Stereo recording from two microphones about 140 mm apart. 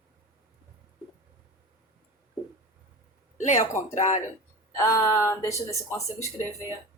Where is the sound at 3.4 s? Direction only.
60° left (ahead or behind).